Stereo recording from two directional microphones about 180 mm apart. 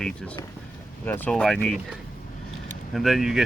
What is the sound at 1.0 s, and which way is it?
Speech, 10° left (ahead or behind).